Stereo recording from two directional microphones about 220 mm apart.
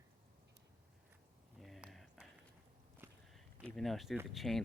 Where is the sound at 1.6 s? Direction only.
Centre (ahead or behind).